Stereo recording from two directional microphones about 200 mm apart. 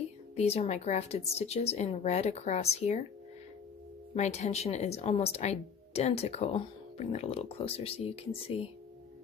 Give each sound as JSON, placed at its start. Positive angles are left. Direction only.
{"t": 0.4, "sound": "speech", "side_deg": 30}
{"t": 4.1, "sound": "speech", "side_deg": 30}